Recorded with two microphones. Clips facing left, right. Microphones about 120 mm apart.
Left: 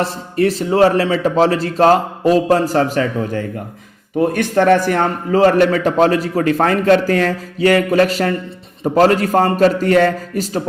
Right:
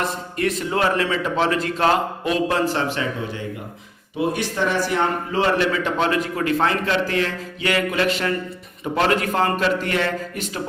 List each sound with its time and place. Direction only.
0.0 s a man's voice: 35° left (ahead or behind)
4.2 s a man's voice: 55° left (ahead or behind); by 10.6 s 40° left (ahead or behind)